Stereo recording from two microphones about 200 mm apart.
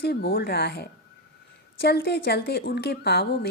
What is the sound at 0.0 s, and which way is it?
Speech, 50° left (ahead or behind).